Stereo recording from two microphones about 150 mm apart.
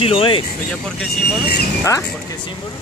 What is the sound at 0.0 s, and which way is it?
Speech, 40° left (ahead or behind).